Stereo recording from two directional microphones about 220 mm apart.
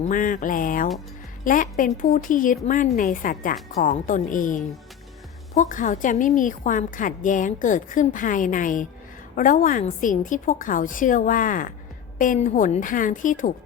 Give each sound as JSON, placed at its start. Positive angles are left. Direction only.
{"t": 0.0, "sound": "a woman's voice", "side_deg": 35}